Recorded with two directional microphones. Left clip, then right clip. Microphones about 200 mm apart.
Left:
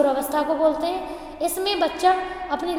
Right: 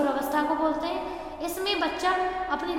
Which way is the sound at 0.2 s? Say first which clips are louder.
Left 4 dB; 55° left (ahead or behind).